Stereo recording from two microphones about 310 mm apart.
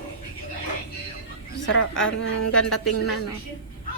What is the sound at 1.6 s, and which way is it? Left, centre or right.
A woman's voice, left.